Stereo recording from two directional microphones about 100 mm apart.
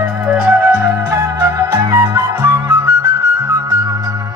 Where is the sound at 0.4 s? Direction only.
10° right (ahead or behind).